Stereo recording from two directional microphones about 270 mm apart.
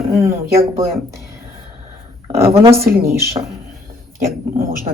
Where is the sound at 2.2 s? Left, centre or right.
Right.